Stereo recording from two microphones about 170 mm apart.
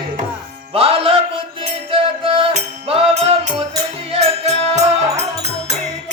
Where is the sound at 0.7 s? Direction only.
35° right (ahead or behind).